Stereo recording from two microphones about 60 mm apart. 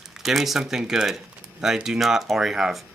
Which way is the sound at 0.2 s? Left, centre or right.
Centre.